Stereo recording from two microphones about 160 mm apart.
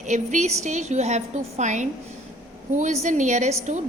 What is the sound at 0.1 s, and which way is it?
A woman's voice, 50° right (ahead or behind).